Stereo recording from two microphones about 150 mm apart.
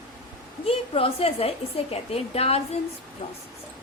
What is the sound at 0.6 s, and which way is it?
A woman's voice, 40° left (ahead or behind).